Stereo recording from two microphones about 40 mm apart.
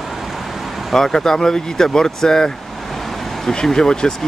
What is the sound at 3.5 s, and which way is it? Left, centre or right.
Speech, centre.